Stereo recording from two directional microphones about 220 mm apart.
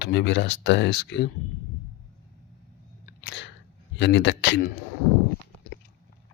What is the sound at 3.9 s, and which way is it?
Speech, 50° left (ahead or behind).